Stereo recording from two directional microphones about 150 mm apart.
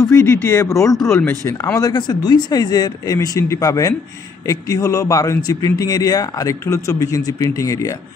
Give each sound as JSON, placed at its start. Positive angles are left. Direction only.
{"t": 0.0, "sound": "a man's voice", "side_deg": 15}